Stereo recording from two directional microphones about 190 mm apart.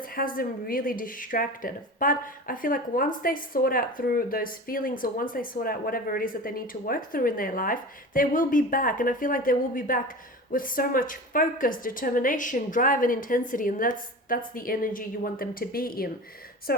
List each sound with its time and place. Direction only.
0.2 s speech: 50° left (ahead or behind)